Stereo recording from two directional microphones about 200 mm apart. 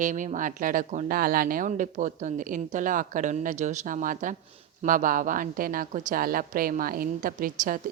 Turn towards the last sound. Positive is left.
turn(degrees=-45)  # may be behind; listen again after turning